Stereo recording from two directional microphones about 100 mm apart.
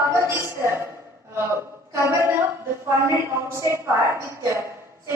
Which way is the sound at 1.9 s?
30° right (ahead or behind).